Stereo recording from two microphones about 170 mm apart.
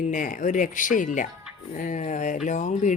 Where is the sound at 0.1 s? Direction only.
50° left (ahead or behind).